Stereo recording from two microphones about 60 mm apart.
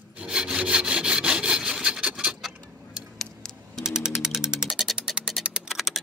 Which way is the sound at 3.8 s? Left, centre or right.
Centre.